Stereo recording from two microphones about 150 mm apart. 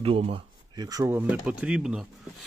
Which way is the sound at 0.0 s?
40° right (ahead or behind).